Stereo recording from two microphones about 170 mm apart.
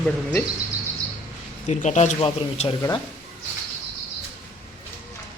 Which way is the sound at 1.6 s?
45° left (ahead or behind).